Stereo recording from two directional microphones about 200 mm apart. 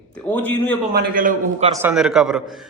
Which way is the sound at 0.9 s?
45° right (ahead or behind).